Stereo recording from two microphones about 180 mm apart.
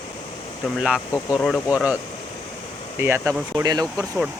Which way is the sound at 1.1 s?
20° left (ahead or behind).